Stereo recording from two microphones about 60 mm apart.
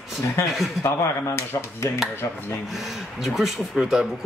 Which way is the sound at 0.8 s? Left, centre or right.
Left.